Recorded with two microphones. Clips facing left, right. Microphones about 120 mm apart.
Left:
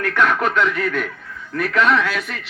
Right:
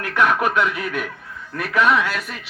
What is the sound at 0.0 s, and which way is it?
Speech, 10° right (ahead or behind).